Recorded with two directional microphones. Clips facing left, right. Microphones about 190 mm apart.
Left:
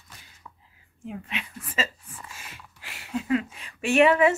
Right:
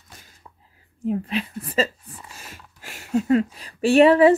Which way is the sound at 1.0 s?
35° right (ahead or behind).